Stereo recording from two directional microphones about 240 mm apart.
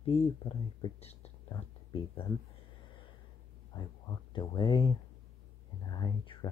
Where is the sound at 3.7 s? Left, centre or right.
Centre.